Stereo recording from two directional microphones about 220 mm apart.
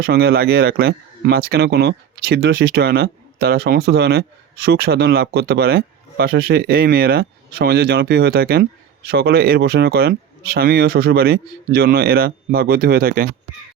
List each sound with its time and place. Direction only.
0.0 s speech: 45° right (ahead or behind)